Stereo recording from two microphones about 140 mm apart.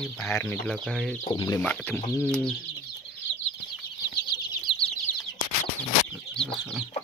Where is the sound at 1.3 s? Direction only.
25° left (ahead or behind).